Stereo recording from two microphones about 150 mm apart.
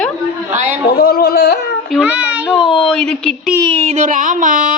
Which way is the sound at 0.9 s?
90° left.